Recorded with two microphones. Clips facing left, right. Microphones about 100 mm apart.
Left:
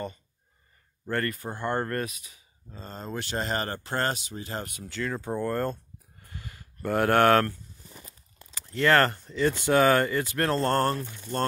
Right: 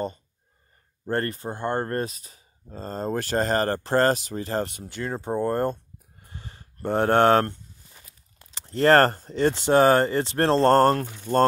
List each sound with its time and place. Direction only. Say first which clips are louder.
1.0 s speech: right 3 dB; 30° right (ahead or behind)
4.7 s speech: right 1 dB; 20° right (ahead or behind)
6.2 s a sound: even; 30° right (ahead or behind)
8.5 s speech: right 5 dB; 35° right (ahead or behind)
11.0 s mantra: right 9 dB; 65° right (ahead or behind)